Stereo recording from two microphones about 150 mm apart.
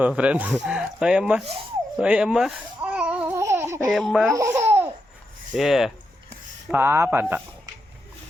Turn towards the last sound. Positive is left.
turn(degrees=-15)  # may be behind; listen again after turning